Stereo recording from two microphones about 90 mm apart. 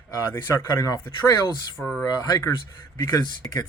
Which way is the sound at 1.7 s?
Centre (ahead or behind).